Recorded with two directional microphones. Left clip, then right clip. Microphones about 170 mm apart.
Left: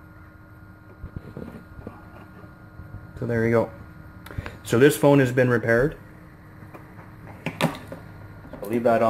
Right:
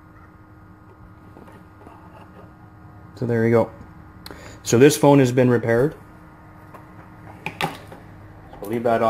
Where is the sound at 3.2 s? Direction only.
30° right (ahead or behind).